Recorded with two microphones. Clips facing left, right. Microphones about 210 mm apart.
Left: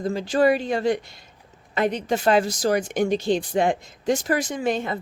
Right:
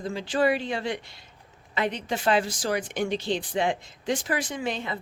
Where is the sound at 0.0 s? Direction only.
40° left (ahead or behind).